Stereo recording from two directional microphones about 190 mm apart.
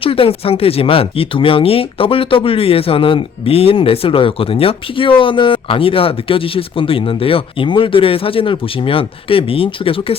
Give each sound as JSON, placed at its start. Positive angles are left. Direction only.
{"t": 0.0, "sound": "speech", "side_deg": 30}